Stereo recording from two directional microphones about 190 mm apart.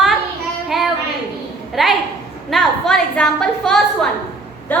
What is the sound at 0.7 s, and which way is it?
A woman's voice, centre (ahead or behind).